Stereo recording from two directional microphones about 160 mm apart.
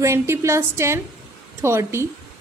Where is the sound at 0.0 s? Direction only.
20° right (ahead or behind).